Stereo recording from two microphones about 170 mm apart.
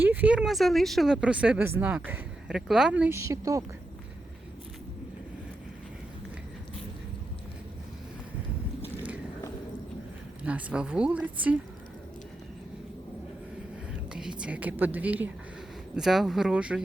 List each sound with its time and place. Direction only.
0.0 s speech: 10° right (ahead or behind)
10.4 s speech: 10° right (ahead or behind)
14.1 s speech: 5° right (ahead or behind)